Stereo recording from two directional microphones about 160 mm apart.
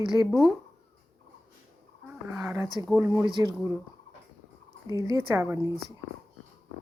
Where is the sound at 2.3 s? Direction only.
15° right (ahead or behind).